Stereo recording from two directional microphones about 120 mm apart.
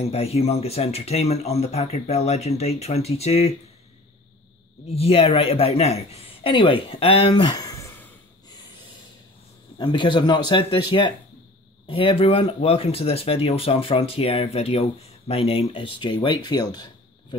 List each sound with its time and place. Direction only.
0.0 s speech: 60° left (ahead or behind)
4.8 s speech: 55° left (ahead or behind); by 7.9 s 25° left (ahead or behind)
8.5 s snort: 35° left (ahead or behind)
9.8 s a man's voice: 40° left (ahead or behind)